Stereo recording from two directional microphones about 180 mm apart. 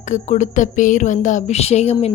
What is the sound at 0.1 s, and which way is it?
Speech, 45° left (ahead or behind).